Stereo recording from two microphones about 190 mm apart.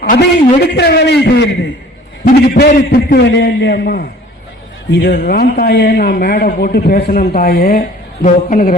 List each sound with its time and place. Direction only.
0.0 s a man's voice: 60° left (ahead or behind)
7.8 s a woman's voice: 40° left (ahead or behind)